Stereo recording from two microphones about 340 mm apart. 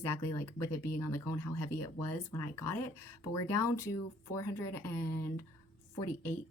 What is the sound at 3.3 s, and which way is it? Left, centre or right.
A woman's voice, centre.